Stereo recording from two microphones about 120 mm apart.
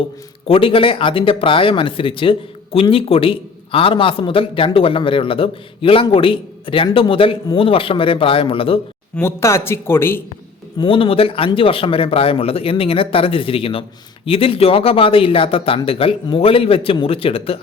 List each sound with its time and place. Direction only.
0.4 s a man's voice: 50° left (ahead or behind)
9.2 s a man's voice: 20° left (ahead or behind)
10.8 s a man's voice: 45° left (ahead or behind)